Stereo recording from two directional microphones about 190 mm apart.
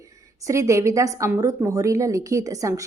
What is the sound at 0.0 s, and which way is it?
A woman's voice, 15° right (ahead or behind).